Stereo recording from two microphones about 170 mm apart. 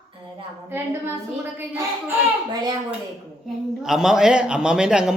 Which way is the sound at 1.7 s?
20° right (ahead or behind).